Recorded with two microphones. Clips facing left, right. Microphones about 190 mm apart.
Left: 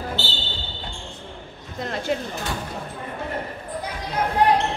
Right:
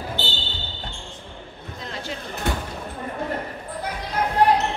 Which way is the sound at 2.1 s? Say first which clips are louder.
Left 12 dB; 60° left (ahead or behind).